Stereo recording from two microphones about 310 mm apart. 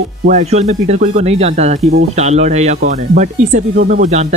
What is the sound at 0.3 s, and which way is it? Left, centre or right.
Speech, right.